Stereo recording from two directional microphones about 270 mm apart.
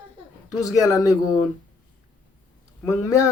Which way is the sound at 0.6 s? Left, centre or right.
Centre.